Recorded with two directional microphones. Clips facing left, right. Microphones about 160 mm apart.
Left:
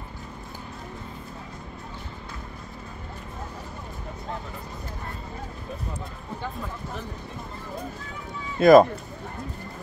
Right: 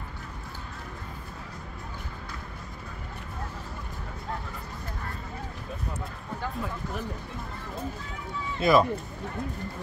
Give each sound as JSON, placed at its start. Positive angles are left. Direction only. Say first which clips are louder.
{"t": 8.5, "sound": "speech", "louder": "left 8 dB", "side_deg": 45}